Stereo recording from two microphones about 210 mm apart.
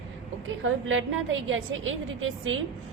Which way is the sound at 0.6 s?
65° right (ahead or behind).